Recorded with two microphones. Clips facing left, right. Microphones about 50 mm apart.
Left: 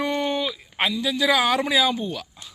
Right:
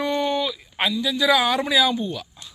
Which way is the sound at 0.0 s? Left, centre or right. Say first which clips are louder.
Right 1 dB; left.